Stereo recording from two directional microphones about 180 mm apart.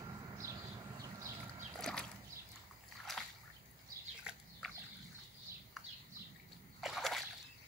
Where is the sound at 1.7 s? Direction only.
5° left (ahead or behind).